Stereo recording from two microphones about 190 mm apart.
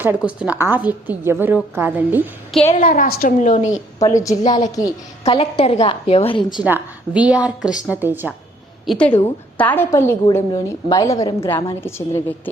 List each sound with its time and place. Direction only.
0.0 s a woman's voice: 10° right (ahead or behind)
2.8 s a woman's voice: 45° left (ahead or behind)
4.0 s a woman's voice: 15° left (ahead or behind)
5.2 s a woman's voice: 30° left (ahead or behind)
6.7 s a woman's voice: 10° right (ahead or behind)
8.9 s a woman's voice: 5° left (ahead or behind)